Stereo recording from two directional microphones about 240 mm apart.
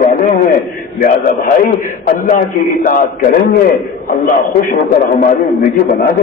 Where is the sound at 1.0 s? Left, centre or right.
Left.